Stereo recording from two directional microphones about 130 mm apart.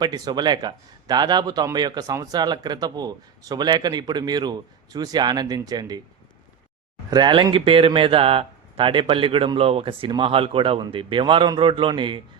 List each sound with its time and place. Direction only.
0.0 s speech: 35° right (ahead or behind)
7.1 s speech: 35° right (ahead or behind)